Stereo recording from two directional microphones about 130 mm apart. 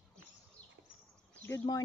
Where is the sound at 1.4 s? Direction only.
20° left (ahead or behind).